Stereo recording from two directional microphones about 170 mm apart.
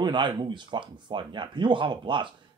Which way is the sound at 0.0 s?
25° right (ahead or behind).